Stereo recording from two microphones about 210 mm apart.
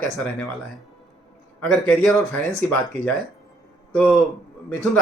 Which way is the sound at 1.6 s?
Centre (ahead or behind).